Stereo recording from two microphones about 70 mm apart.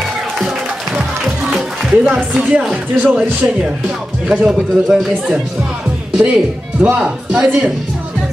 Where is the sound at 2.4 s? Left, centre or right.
Centre.